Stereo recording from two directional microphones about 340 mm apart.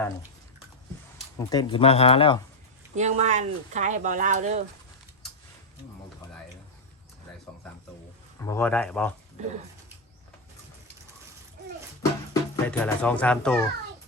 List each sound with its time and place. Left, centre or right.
1.5 s speech: centre
2.9 s speech: centre
8.4 s speech: centre
9.4 s speech: centre
12.3 s speech: centre